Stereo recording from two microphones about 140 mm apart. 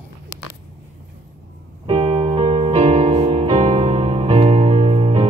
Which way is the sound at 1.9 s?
45° right (ahead or behind).